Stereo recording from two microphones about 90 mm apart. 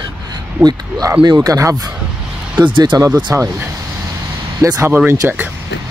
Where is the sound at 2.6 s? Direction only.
60° right (ahead or behind).